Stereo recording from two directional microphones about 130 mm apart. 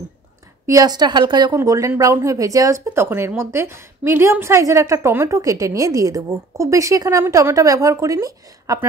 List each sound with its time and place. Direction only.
0.7 s a woman's voice: 30° right (ahead or behind)
1.6 s speech: 20° right (ahead or behind)